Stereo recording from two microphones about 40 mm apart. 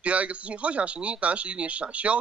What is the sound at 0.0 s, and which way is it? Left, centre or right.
Speech, right.